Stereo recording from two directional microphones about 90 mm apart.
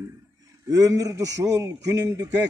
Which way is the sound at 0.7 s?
40° right (ahead or behind).